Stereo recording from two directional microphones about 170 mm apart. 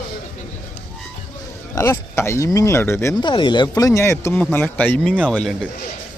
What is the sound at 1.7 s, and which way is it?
Speech, 15° left (ahead or behind).